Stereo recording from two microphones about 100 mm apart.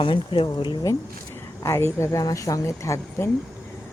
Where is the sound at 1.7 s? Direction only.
30° left (ahead or behind).